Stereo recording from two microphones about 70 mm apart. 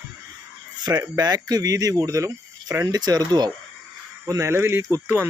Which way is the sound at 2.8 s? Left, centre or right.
Right.